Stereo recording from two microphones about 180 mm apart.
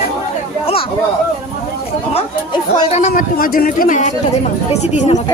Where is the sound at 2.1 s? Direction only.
30° left (ahead or behind).